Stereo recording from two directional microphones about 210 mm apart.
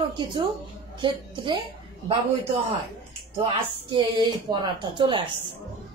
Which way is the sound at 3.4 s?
25° right (ahead or behind).